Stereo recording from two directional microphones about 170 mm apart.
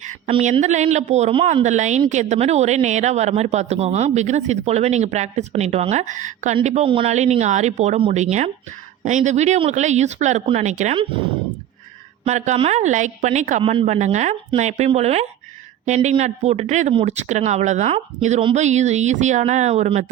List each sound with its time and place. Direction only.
0.3 s speech: 35° right (ahead or behind)
12.2 s speech: 40° right (ahead or behind)
13.6 s speech: 35° right (ahead or behind)